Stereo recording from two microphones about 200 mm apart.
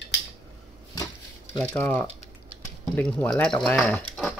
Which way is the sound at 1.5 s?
10° left (ahead or behind).